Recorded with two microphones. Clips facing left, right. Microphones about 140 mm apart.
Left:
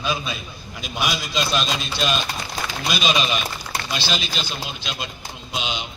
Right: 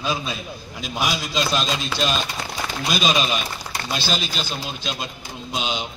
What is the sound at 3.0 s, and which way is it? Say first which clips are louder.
Speech: even; 40° right (ahead or behind).